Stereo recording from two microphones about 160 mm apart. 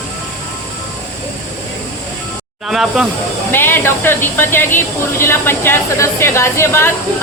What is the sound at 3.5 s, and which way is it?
Speech, 15° left (ahead or behind).